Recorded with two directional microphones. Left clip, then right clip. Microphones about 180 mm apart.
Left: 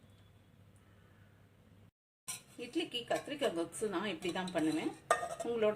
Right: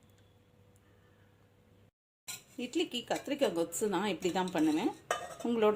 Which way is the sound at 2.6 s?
50° right (ahead or behind).